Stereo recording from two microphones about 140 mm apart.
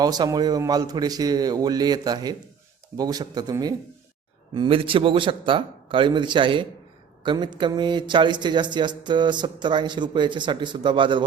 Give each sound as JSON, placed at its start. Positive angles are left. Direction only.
{"t": 0.0, "sound": "a man's voice", "side_deg": -30}